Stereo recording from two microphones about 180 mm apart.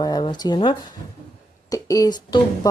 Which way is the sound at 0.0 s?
25° left (ahead or behind).